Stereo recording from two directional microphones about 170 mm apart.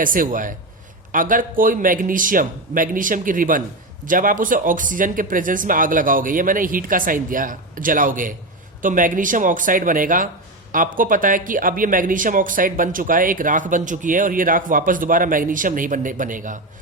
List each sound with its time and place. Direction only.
0.0 s speech: 55° right (ahead or behind)